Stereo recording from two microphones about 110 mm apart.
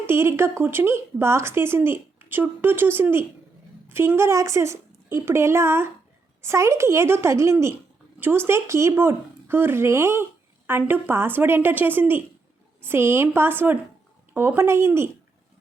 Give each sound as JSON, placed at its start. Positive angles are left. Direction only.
{"t": 0.1, "sound": "speech", "side_deg": -25}